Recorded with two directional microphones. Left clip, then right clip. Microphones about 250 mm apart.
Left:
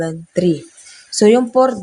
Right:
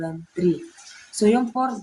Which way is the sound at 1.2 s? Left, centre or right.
Left.